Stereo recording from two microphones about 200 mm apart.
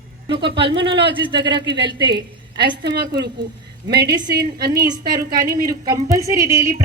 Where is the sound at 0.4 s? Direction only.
25° right (ahead or behind).